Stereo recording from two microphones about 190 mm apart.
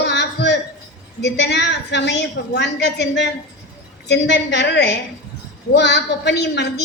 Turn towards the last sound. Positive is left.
turn(degrees=60)  # may be behind; listen again after turning